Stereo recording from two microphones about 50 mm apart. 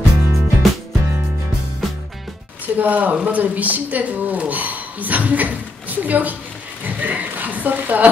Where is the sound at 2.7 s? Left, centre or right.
Right.